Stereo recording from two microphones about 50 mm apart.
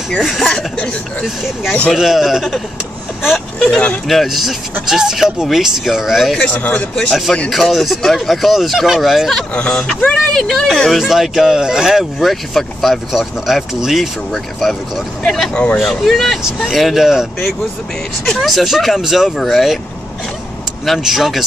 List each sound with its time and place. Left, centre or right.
0.2 s speech: centre
3.5 s speech: centre
4.1 s speech: centre
6.6 s speech: left
7.4 s speech: centre
9.5 s speech: left
10.1 s speech: centre
11.0 s speech: centre
15.5 s speech: left
15.8 s speech: centre
18.4 s speech: centre
21.0 s speech: centre